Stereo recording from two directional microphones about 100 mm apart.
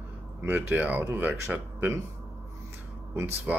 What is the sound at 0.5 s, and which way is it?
Speech, 15° right (ahead or behind).